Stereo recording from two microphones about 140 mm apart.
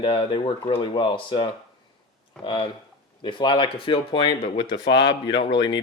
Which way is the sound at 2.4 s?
35° left (ahead or behind).